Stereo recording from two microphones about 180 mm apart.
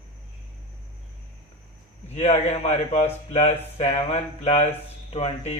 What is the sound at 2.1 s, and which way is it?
Speech, 35° left (ahead or behind).